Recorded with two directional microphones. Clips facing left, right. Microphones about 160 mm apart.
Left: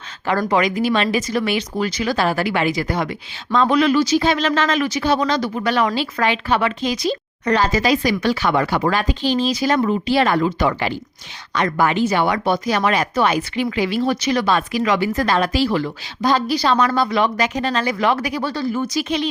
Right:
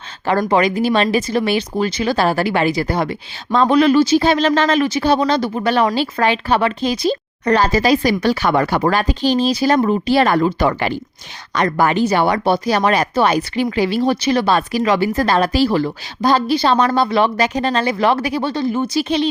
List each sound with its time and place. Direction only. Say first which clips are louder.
0.3 s speech: right 3 dB; 30° right (ahead or behind)